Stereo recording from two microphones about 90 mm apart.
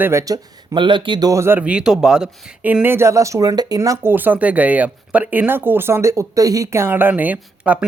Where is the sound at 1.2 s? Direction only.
35° right (ahead or behind).